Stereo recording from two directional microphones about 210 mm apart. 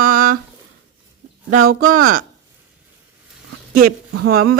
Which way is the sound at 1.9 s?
40° right (ahead or behind).